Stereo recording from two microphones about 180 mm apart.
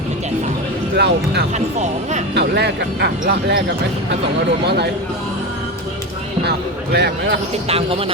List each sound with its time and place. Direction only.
0.9 s speech: 70° right (ahead or behind)
1.5 s speech: 40° right (ahead or behind)
2.3 s speech: 70° right (ahead or behind)
4.6 s speech: 65° right (ahead or behind)
6.9 s speech: 70° right (ahead or behind)
7.7 s speech: 30° right (ahead or behind)